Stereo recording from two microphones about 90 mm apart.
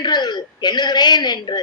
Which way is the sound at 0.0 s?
55° left (ahead or behind).